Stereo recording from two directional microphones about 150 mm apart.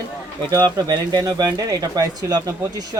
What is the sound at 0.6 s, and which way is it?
Speech, 25° right (ahead or behind).